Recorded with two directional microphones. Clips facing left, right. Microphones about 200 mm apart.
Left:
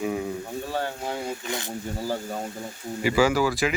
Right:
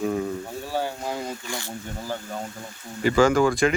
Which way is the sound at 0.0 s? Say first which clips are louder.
Right 2 dB; 10° left (ahead or behind).